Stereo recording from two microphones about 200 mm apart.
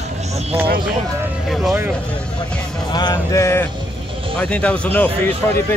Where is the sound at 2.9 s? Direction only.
20° left (ahead or behind).